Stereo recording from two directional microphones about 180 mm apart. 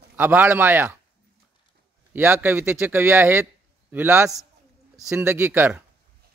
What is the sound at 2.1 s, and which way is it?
Speech, 10° right (ahead or behind).